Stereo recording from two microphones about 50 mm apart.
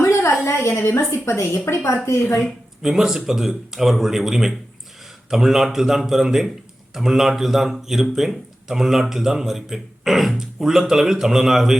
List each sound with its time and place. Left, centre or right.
0.0 s a sound: left
0.4 s a woman's voice: left
2.4 s a man's voice: centre